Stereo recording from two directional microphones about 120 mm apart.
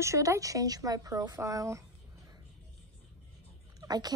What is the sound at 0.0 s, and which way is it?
A woman's voice, 25° right (ahead or behind).